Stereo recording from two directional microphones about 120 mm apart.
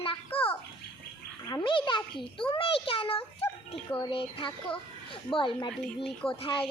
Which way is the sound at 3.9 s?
45° left (ahead or behind).